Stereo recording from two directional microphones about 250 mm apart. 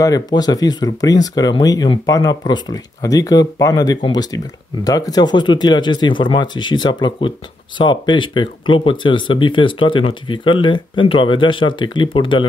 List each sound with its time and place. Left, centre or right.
0.0 s speech: centre